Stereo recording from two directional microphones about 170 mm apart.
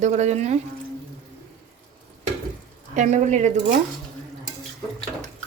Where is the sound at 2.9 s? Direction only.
45° right (ahead or behind).